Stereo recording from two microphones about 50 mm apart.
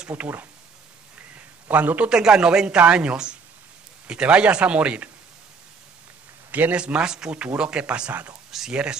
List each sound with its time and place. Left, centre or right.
0.1 s speech: right
1.3 s a sound: right
2.0 s speech: centre
6.5 s speech: right
6.8 s speech: centre
8.5 s speech: centre